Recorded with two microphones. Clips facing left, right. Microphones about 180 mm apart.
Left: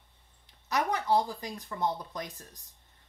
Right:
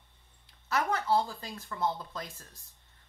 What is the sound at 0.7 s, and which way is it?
Speech, 15° left (ahead or behind).